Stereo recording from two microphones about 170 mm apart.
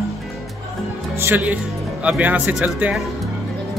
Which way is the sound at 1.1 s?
10° right (ahead or behind).